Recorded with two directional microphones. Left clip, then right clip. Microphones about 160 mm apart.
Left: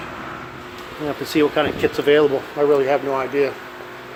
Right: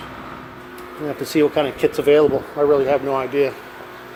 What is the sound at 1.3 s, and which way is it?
Speech, 20° right (ahead or behind).